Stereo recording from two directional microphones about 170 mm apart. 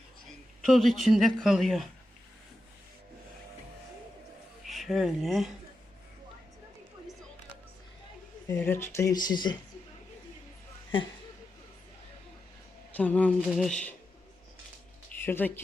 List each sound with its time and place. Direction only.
0.6 s speech: centre (ahead or behind)
4.6 s speech: centre (ahead or behind)
8.4 s speech: 15° left (ahead or behind)
13.0 s speech: 10° left (ahead or behind)
15.2 s speech: 10° left (ahead or behind)